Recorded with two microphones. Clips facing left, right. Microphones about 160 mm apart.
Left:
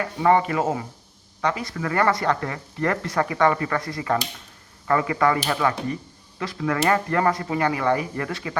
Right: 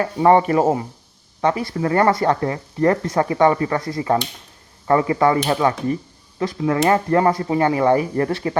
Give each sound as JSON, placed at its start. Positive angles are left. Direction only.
{"t": 0.0, "sound": "speech", "side_deg": -30}